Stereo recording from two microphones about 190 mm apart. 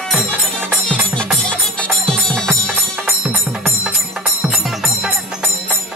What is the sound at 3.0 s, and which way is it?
Music, 5° right (ahead or behind).